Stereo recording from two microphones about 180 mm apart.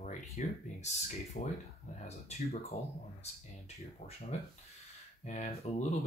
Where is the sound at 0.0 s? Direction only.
40° left (ahead or behind).